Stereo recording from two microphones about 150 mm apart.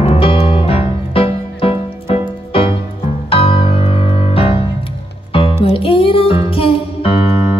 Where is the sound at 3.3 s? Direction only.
40° left (ahead or behind).